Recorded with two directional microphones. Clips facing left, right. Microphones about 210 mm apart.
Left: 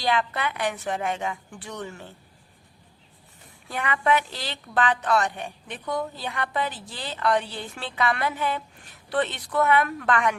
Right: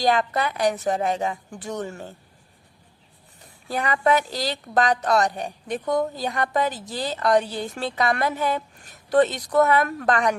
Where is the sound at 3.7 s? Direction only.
40° right (ahead or behind).